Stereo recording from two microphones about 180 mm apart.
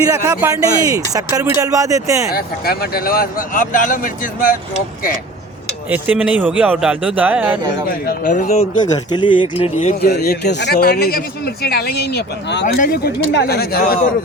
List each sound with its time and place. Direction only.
0.1 s speech: 15° right (ahead or behind)
2.3 s speech: 60° left (ahead or behind)
5.9 s speech: 5° right (ahead or behind)
7.9 s a man's voice: 50° left (ahead or behind)
9.1 s speech: 25° left (ahead or behind)
10.0 s a man's voice: 60° left (ahead or behind)
12.6 s a man's voice: 50° left (ahead or behind)